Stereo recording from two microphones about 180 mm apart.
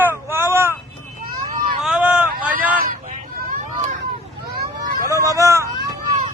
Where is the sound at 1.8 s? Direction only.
5° right (ahead or behind).